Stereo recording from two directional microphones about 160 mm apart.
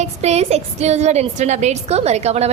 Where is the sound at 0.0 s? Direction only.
45° right (ahead or behind).